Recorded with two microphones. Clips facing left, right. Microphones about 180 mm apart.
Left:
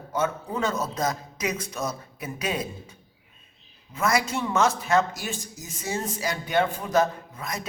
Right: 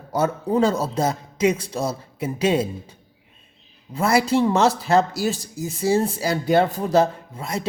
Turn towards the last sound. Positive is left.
turn(degrees=-30)  # may be behind; listen again after turning